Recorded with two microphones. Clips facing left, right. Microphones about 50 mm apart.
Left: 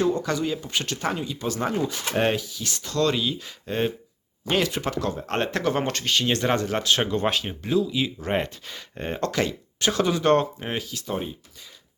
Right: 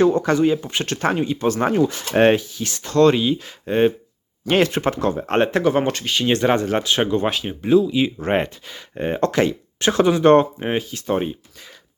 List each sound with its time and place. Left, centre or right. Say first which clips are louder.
0.0 s speech: right 8 dB; right
0.5 s speech: right 6 dB; right
0.9 s speech: right 11 dB; right
4.4 s speech: right 6 dB; right
5.6 s speech: right 6 dB; centre
7.6 s speech: right 9 dB; right
8.2 s speech: right 3 dB; right
8.6 s speech: right 7 dB; centre; by 11.0 s right
11.0 s speech: right 8 dB; right